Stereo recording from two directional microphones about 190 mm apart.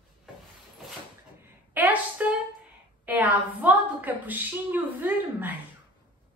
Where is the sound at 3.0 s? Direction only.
10° right (ahead or behind).